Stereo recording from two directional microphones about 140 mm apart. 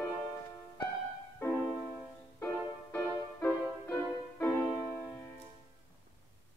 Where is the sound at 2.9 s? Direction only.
10° left (ahead or behind).